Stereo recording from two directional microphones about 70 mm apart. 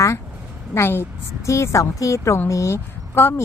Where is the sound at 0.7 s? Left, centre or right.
Left.